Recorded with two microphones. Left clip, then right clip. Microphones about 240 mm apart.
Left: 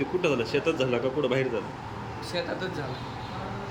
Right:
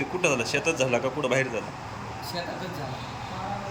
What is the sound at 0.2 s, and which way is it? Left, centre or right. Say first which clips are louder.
Speech: right 2 dB; centre.